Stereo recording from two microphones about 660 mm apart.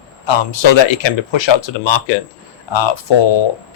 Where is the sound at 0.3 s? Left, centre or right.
Left.